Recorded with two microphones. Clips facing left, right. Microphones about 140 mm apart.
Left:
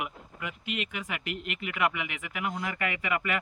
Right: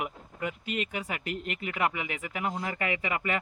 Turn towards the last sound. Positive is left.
turn(degrees=-35)  # may be behind; listen again after turning